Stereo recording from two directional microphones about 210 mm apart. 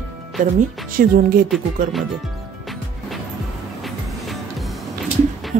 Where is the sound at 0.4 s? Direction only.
40° right (ahead or behind).